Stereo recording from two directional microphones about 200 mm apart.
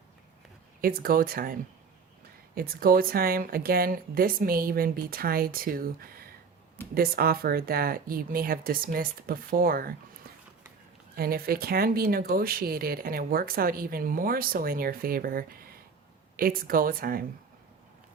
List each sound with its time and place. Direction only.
0.8 s speech: 45° right (ahead or behind)
2.6 s speech: 45° right (ahead or behind)
11.1 s speech: 50° right (ahead or behind)